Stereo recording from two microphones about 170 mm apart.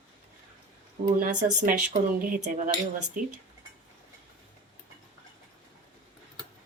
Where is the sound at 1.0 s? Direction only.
45° right (ahead or behind).